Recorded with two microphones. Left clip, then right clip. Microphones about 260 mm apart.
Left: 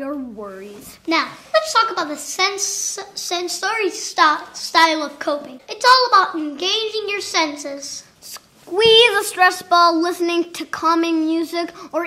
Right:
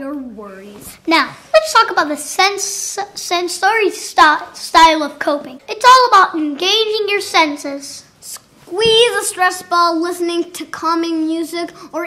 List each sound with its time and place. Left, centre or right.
1.0 s a child's voice: right
8.7 s speech: left